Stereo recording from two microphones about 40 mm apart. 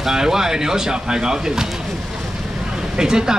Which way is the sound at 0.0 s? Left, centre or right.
Centre.